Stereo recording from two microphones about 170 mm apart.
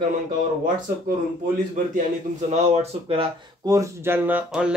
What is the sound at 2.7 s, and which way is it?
Speech, 35° right (ahead or behind).